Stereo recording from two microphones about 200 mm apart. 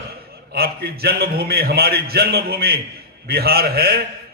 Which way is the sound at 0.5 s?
50° right (ahead or behind).